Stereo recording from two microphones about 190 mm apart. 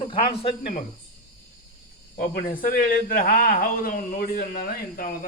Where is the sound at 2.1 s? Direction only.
45° left (ahead or behind).